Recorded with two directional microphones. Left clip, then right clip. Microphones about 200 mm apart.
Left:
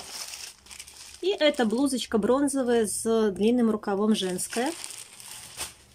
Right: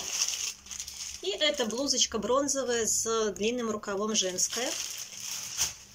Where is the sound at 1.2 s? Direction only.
55° left (ahead or behind).